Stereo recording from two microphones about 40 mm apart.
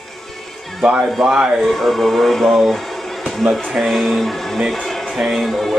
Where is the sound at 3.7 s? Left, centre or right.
Centre.